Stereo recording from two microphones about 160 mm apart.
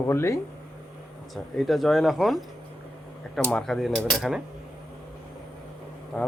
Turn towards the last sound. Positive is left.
turn(degrees=5)  # may be behind; listen again after turning